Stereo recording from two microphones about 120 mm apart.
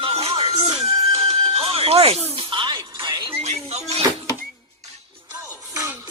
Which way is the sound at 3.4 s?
65° right (ahead or behind).